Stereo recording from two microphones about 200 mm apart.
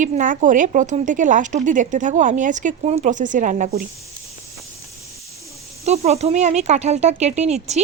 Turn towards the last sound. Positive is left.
turn(degrees=-35)  # may be behind; listen again after turning